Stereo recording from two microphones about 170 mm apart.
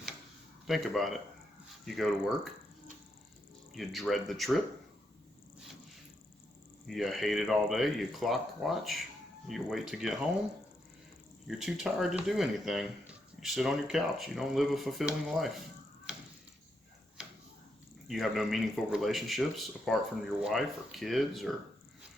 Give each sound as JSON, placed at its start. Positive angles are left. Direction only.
{"t": 0.7, "sound": "speech", "side_deg": 0}
{"t": 3.8, "sound": "speech", "side_deg": 0}
{"t": 6.8, "sound": "speech", "side_deg": 0}
{"t": 11.4, "sound": "speech", "side_deg": 0}
{"t": 18.1, "sound": "speech", "side_deg": 0}